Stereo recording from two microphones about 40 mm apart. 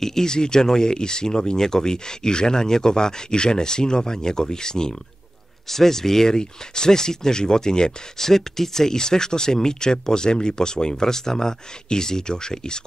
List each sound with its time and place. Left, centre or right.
0.0 s speech: centre